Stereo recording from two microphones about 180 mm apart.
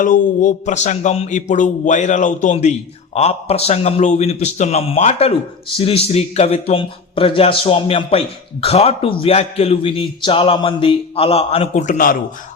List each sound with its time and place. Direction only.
0.0 s a man's voice: 45° left (ahead or behind)